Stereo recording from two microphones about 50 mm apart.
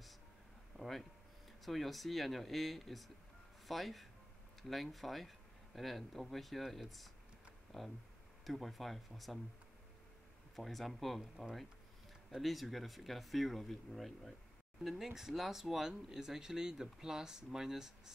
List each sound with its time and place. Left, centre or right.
0.7 s a sound: centre
1.6 s speech: centre
10.5 s speech: centre